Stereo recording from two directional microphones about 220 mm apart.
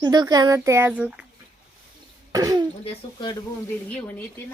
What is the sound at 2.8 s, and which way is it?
Speech, 20° left (ahead or behind).